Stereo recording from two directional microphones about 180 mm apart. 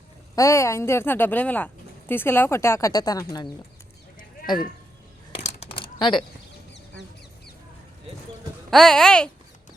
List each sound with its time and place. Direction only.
0.3 s speech: 15° left (ahead or behind)
5.4 s a sound: 35° left (ahead or behind)
8.7 s speech: centre (ahead or behind)